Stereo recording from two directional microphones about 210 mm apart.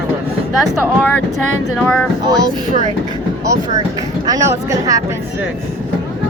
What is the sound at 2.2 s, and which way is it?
Speech, 20° right (ahead or behind).